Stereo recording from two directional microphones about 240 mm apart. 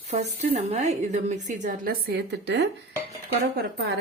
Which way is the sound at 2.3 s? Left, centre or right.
Right.